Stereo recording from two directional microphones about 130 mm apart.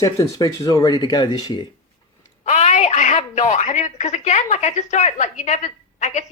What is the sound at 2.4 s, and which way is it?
A woman's voice, 60° left (ahead or behind).